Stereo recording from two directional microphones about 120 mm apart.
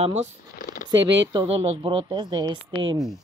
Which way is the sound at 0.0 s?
65° right (ahead or behind).